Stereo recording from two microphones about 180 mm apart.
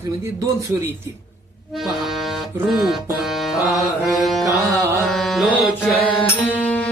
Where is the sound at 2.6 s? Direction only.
Centre (ahead or behind).